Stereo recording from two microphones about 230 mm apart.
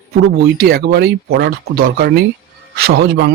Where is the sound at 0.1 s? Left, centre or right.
Right.